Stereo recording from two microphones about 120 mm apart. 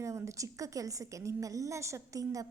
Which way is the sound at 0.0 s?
25° right (ahead or behind).